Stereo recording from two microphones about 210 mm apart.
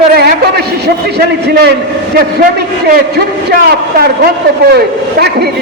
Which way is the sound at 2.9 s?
45° right (ahead or behind).